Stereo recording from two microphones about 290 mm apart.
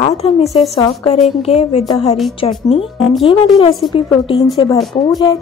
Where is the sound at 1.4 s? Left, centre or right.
Left.